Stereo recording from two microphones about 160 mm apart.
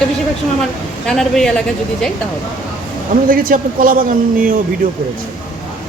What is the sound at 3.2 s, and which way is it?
A man's voice, 60° right (ahead or behind).